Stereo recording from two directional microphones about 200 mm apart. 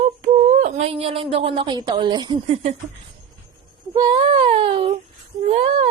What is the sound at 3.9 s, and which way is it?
A woman's voice, 20° right (ahead or behind).